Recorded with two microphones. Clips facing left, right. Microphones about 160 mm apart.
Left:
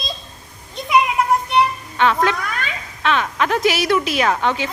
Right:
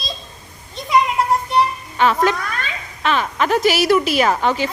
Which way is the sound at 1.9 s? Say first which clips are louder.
Right 1 dB; 5° right (ahead or behind).